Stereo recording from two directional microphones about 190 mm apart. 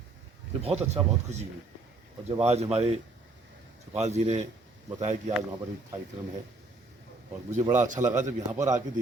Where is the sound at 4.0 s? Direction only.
35° right (ahead or behind).